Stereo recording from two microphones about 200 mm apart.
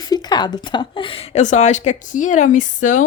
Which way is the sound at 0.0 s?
20° left (ahead or behind).